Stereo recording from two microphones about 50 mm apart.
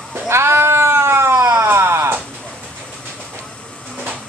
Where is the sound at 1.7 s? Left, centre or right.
Right.